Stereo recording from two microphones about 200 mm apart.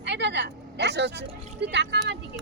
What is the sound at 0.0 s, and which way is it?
Vehicle, 60° right (ahead or behind).